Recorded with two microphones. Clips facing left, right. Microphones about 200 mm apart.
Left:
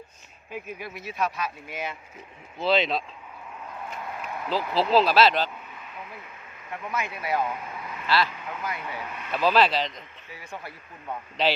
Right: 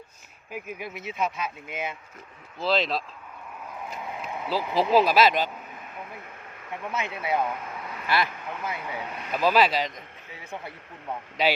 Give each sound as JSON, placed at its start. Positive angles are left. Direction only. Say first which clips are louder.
{"t": 0.5, "sound": "speech", "louder": "even", "side_deg": -15}
{"t": 2.6, "sound": "speech", "louder": "left 2 dB", "side_deg": 0}
{"t": 6.9, "sound": "speech", "louder": "even", "side_deg": -25}
{"t": 9.3, "sound": "speech", "louder": "even", "side_deg": -10}
{"t": 10.4, "sound": "speech", "louder": "right 2 dB", "side_deg": -20}
{"t": 11.4, "sound": "speech", "louder": "even", "side_deg": -10}